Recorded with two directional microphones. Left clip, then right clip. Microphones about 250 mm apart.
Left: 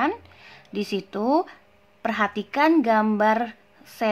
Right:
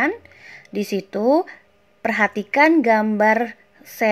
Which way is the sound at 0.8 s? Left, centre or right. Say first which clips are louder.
Right 4 dB; centre.